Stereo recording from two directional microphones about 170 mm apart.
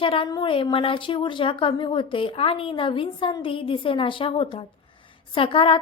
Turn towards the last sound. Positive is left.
turn(degrees=30)  # may be behind; listen again after turning